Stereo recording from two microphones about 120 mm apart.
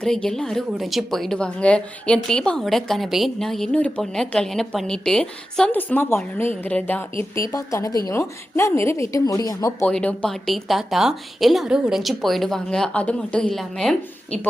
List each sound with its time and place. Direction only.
0.0 s a woman's voice: 5° left (ahead or behind); by 9.7 s 30° left (ahead or behind)
9.8 s a woman's voice: 10° left (ahead or behind)